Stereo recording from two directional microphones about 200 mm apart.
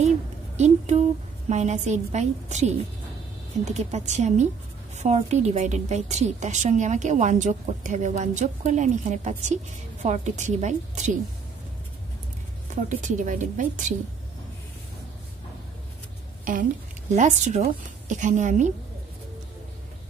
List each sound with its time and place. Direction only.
0.6 s a woman's voice: 35° right (ahead or behind)
12.8 s a woman's voice: 40° right (ahead or behind)
17.1 s a woman's voice: 35° right (ahead or behind)